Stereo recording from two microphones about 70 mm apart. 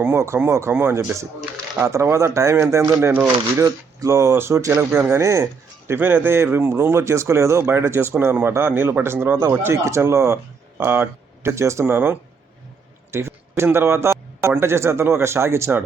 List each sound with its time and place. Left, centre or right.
0.4 s speech: right
2.7 s speech: right
4.7 s speech: right
5.9 s speech: right
11.5 s speech: right
11.9 s speech: right
13.1 s a sound: right
13.7 s a man's voice: right